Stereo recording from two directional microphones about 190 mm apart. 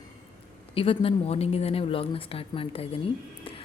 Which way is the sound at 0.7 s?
30° left (ahead or behind).